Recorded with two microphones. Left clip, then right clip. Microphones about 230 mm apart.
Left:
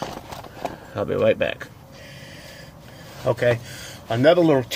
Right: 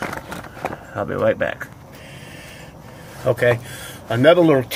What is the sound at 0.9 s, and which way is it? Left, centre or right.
Speech, left.